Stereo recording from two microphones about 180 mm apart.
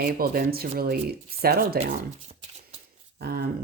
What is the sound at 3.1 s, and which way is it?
Speech, 60° right (ahead or behind).